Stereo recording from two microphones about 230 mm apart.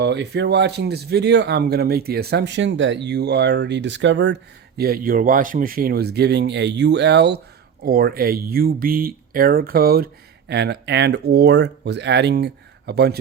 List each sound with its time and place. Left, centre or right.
0.0 s speech: right
4.8 s speech: right